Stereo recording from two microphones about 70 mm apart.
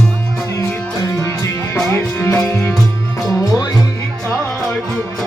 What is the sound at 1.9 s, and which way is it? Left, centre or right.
Music, left.